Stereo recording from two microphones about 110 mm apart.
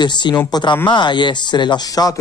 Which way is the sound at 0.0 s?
40° left (ahead or behind).